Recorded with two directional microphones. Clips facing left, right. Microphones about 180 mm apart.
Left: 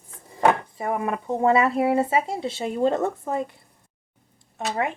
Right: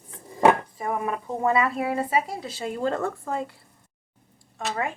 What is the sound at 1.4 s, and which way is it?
Speech, 25° left (ahead or behind).